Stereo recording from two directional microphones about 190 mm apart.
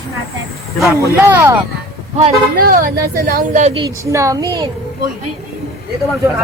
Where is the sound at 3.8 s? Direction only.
15° right (ahead or behind).